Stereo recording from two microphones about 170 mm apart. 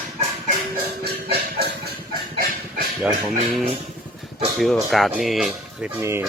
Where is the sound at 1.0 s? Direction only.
70° right (ahead or behind).